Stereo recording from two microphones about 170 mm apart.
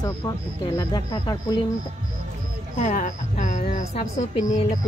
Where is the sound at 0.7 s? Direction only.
20° left (ahead or behind).